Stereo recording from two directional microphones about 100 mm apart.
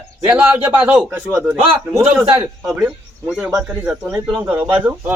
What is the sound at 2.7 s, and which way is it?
Speech, 15° right (ahead or behind).